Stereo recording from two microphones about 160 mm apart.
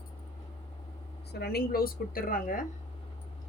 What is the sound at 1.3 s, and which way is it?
A woman's voice, 80° left.